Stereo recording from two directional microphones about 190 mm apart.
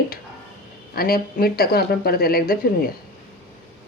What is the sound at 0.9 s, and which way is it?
Speech, 50° left (ahead or behind).